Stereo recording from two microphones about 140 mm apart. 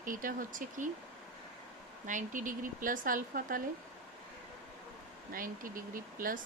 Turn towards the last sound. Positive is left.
turn(degrees=-75)  # may be behind; listen again after turning